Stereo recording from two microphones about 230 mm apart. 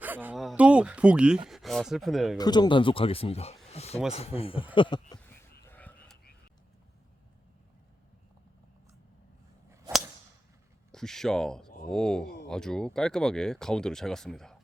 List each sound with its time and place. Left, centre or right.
0.0 s speech: centre
2.4 s speech: centre
4.7 s a sound: left
10.9 s speech: centre